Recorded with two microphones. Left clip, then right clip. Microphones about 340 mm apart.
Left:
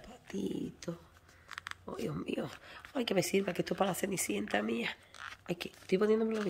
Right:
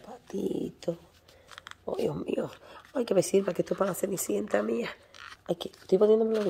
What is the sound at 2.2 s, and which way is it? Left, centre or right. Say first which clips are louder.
Speech: right 7 dB; centre.